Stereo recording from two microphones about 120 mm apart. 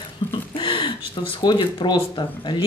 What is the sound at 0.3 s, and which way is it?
Speech, 45° left (ahead or behind).